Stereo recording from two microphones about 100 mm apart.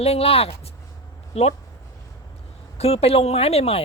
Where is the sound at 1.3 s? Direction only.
90° left.